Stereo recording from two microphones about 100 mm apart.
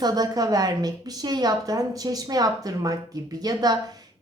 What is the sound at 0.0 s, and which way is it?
A woman's voice, 40° right (ahead or behind).